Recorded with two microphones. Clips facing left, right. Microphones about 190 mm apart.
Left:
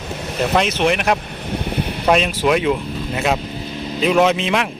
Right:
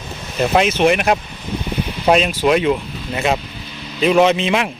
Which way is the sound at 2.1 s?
Centre (ahead or behind).